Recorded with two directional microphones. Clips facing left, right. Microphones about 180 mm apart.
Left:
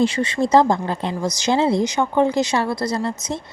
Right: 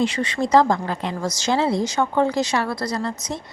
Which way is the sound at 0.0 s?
30° left (ahead or behind).